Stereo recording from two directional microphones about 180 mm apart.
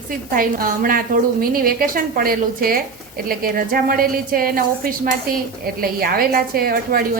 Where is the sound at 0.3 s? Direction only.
50° right (ahead or behind).